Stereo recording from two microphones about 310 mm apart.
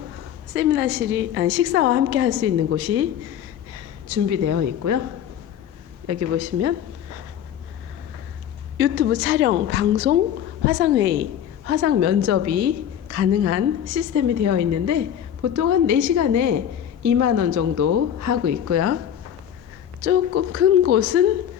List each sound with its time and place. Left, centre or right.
0.5 s a woman's voice: right
4.1 s a woman's voice: right
6.1 s a woman's voice: right
8.8 s a woman's voice: right
11.6 s a woman's voice: right
20.1 s a woman's voice: right